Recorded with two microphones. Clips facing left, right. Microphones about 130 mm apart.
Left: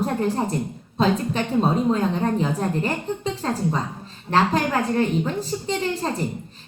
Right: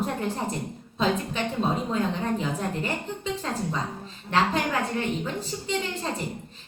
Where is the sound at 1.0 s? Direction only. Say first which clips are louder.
Left 5 dB; 40° left (ahead or behind).